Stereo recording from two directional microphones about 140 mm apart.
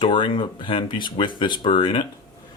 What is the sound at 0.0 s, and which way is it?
Speech, 35° left (ahead or behind).